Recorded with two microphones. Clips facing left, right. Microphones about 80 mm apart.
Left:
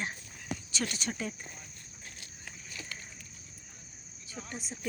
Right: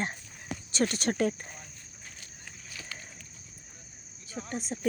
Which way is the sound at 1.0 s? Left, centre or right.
Right.